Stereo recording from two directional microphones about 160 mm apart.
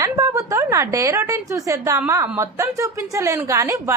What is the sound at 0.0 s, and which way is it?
A woman's voice, 20° right (ahead or behind).